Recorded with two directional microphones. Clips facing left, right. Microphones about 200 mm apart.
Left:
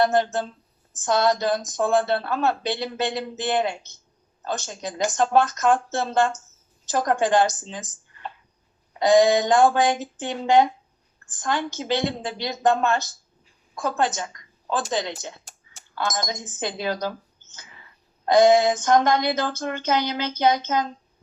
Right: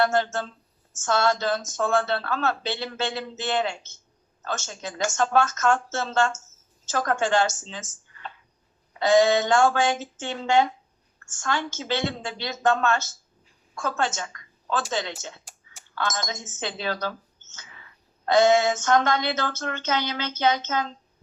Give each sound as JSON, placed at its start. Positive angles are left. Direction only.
{"t": 0.0, "sound": "a woman's voice", "side_deg": 15}
{"t": 9.0, "sound": "a woman's voice", "side_deg": 15}
{"t": 11.3, "sound": "a woman's voice", "side_deg": 15}
{"t": 18.3, "sound": "a woman's voice", "side_deg": 15}